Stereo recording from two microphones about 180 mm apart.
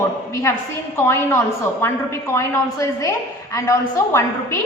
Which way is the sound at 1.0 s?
15° left (ahead or behind).